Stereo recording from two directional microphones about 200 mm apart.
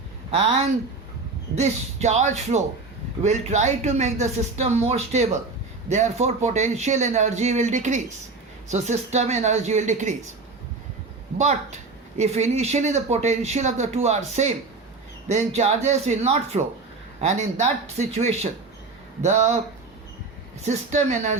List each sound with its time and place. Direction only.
1.5 s a woman's voice: 35° right (ahead or behind)
11.3 s a woman's voice: 35° right (ahead or behind)
20.7 s a woman's voice: 35° right (ahead or behind)